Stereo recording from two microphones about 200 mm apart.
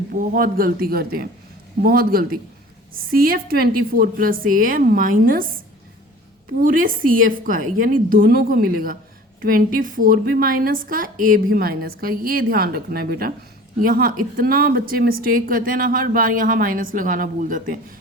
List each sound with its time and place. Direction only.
0.1 s a woman's voice: 45° right (ahead or behind)
6.6 s a woman's voice: 45° right (ahead or behind)